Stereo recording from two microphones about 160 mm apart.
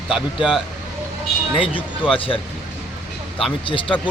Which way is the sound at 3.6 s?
30° left (ahead or behind).